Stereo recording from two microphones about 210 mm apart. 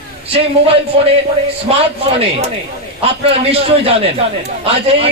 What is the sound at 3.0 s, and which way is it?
A man's voice, 30° right (ahead or behind).